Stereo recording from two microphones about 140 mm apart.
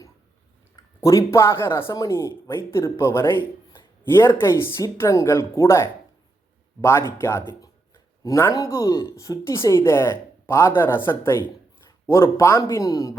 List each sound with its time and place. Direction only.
0.8 s speech: 25° left (ahead or behind)
7.2 s speech: 20° left (ahead or behind)